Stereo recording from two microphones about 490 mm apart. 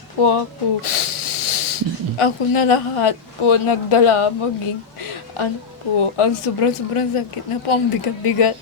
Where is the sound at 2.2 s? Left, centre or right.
Left.